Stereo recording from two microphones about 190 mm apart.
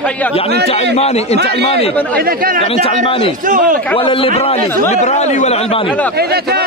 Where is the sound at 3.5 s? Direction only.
45° right (ahead or behind).